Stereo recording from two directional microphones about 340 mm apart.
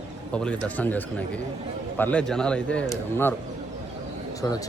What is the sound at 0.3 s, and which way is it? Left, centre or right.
Speech, centre.